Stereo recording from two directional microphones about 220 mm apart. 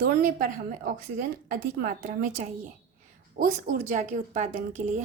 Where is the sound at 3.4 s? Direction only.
35° right (ahead or behind).